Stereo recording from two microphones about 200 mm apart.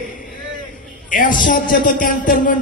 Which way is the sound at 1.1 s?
40° left (ahead or behind).